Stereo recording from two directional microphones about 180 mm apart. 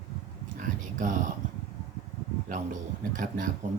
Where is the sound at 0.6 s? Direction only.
45° right (ahead or behind).